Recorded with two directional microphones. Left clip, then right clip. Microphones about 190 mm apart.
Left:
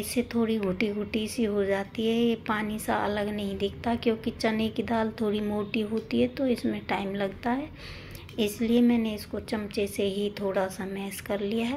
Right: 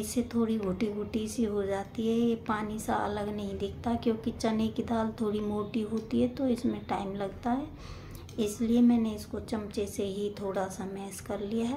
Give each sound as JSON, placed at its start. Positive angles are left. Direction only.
{"t": 0.0, "sound": "a woman's voice", "side_deg": 5}